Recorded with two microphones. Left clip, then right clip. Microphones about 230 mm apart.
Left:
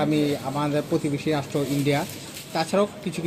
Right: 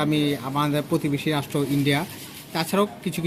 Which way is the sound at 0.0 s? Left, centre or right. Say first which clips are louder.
Even; right.